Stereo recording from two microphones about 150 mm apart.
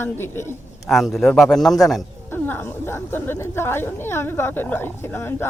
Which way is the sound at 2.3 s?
15° left (ahead or behind).